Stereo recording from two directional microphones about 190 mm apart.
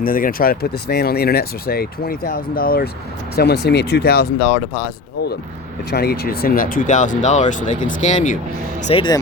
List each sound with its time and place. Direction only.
0.0 s speech: 50° left (ahead or behind)
5.9 s speech: 55° left (ahead or behind); by 8.4 s 40° left (ahead or behind)
8.8 s speech: 30° left (ahead or behind)